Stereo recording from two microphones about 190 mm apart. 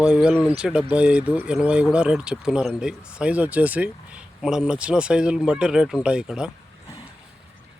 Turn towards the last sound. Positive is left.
turn(degrees=-5)  # may be behind; listen again after turning